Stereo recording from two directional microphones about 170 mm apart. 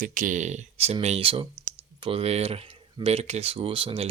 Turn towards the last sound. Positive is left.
turn(degrees=-30)  # may be behind; listen again after turning